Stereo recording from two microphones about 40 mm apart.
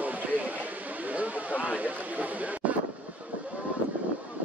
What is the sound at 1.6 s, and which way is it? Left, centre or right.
Speech, right.